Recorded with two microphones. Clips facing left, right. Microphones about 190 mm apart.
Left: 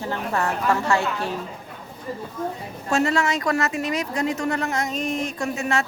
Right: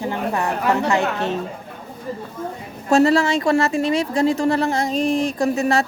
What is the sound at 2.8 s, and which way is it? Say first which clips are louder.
A woman's voice: right 6 dB; 35° right (ahead or behind).